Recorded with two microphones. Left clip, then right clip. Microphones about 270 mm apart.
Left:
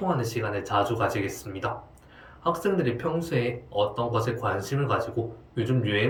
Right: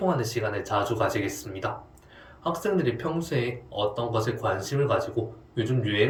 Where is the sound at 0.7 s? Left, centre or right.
Left.